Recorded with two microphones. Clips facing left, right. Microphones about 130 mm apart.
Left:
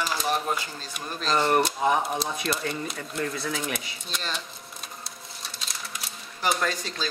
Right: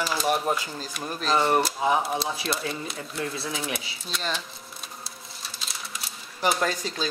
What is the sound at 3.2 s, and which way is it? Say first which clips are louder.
Speech: left 2 dB; 30° right (ahead or behind).